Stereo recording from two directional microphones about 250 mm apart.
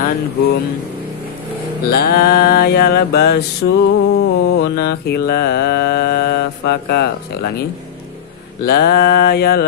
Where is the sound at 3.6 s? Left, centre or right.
Left.